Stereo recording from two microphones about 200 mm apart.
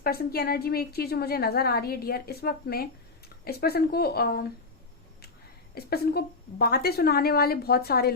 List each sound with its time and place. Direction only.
0.0 s a woman's voice: 50° left (ahead or behind)
5.7 s a woman's voice: 50° left (ahead or behind)